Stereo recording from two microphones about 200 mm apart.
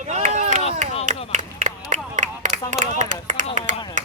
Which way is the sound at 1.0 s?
40° right (ahead or behind).